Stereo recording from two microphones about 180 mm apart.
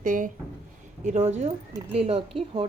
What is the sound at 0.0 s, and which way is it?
Speech, 50° right (ahead or behind).